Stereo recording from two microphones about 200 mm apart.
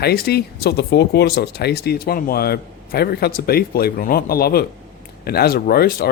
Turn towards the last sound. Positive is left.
turn(degrees=50)  # may be behind; listen again after turning